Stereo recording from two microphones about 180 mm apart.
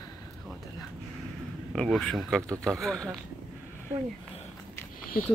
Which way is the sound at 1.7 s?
Centre (ahead or behind).